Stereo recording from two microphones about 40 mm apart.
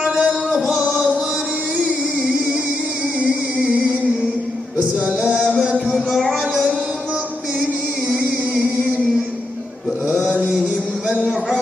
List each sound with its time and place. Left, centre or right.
0.0 s music: centre
0.9 s music: right
3.2 s music: right
4.9 s music: right